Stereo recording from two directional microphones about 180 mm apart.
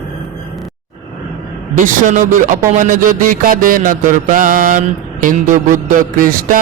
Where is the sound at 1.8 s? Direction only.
45° right (ahead or behind).